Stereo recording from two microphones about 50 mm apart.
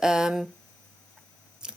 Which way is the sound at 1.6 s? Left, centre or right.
Centre.